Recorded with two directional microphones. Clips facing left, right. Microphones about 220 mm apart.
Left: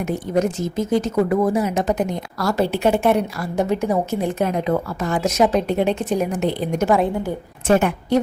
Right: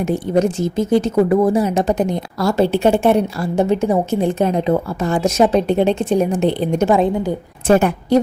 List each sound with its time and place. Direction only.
0.0 s speech: 30° right (ahead or behind)
7.7 s a woman's voice: 35° right (ahead or behind)